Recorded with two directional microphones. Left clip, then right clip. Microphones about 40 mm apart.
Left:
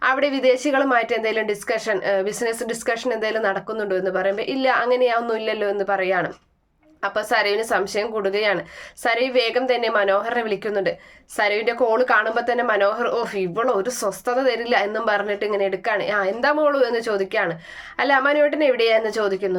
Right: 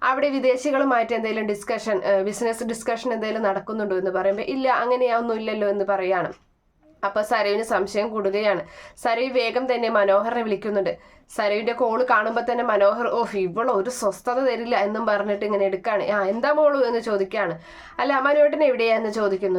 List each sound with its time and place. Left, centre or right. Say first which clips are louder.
0.0 s a woman's voice: left 2 dB; right